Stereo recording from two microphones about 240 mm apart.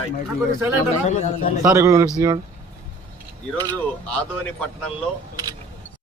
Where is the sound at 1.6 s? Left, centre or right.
Centre.